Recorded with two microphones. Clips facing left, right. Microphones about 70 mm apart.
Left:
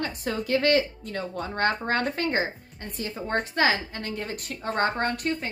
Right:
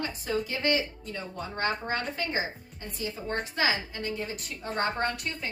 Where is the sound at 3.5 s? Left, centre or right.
Left.